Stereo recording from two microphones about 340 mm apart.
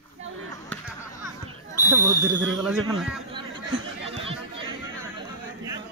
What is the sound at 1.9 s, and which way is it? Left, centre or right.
Speech, centre.